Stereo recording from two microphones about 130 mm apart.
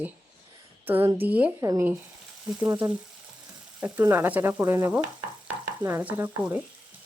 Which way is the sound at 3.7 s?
15° right (ahead or behind).